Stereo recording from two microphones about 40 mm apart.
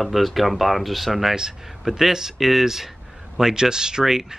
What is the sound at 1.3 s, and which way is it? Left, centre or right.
Speech, centre.